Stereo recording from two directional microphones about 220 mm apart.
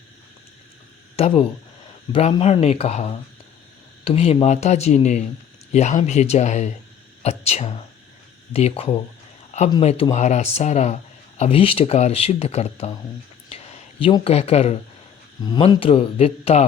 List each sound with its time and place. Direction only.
1.1 s speech: 25° left (ahead or behind)